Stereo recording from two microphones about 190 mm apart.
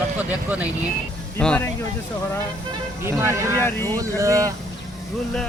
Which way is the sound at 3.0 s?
15° right (ahead or behind).